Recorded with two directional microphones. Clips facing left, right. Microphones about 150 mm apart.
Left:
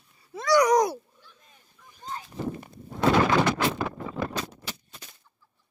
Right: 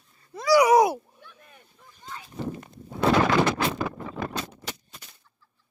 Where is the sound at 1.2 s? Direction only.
65° right (ahead or behind).